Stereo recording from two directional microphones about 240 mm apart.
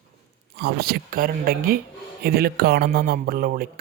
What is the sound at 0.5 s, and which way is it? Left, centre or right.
Speech, right.